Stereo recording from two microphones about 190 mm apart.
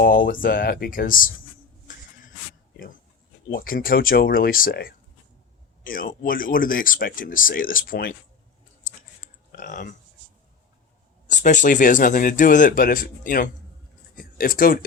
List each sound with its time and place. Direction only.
0.0 s speech: 45° left (ahead or behind)
2.7 s speech: 50° left (ahead or behind)
9.5 s speech: 45° left (ahead or behind)
11.3 s speech: 40° left (ahead or behind)